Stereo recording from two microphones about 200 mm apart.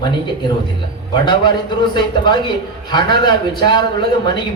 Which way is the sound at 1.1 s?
20° left (ahead or behind).